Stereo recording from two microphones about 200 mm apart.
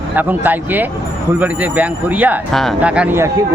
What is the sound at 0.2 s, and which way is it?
Speech, 10° right (ahead or behind).